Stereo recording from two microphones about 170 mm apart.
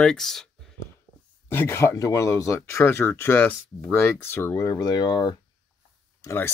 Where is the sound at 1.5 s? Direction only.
15° left (ahead or behind).